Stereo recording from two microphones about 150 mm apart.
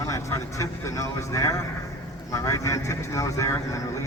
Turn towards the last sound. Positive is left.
turn(degrees=20)  # may be behind; listen again after turning